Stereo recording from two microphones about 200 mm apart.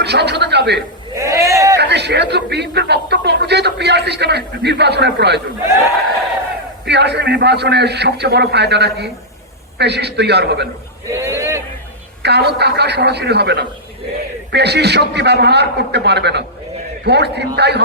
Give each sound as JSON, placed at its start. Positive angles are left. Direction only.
{"t": 0.0, "sound": "speech", "side_deg": -55}
{"t": 1.1, "sound": "sheep", "side_deg": -15}
{"t": 1.8, "sound": "speech", "side_deg": -60}
{"t": 6.8, "sound": "speech", "side_deg": -60}
{"t": 11.1, "sound": "a sound", "side_deg": -15}
{"t": 12.2, "sound": "speech", "side_deg": -55}